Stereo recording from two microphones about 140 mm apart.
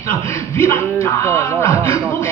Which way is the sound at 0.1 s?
15° left (ahead or behind).